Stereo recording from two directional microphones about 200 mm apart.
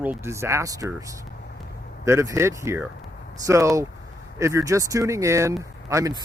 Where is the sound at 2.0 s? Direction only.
15° right (ahead or behind).